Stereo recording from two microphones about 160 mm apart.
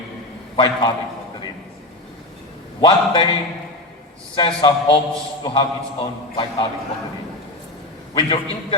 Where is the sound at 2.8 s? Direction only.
30° left (ahead or behind).